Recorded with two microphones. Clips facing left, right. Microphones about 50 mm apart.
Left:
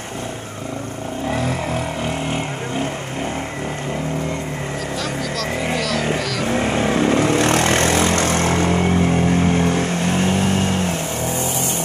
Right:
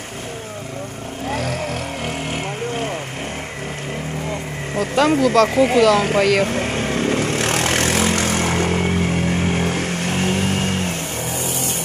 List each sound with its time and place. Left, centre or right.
5.2 s speech: right
5.5 s speech: centre
5.8 s speech: right
6.1 s speech: right
6.4 s vehicle: centre